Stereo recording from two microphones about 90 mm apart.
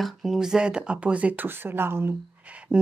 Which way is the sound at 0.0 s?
Centre (ahead or behind).